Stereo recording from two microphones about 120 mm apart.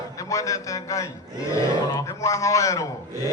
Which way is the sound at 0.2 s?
30° left (ahead or behind).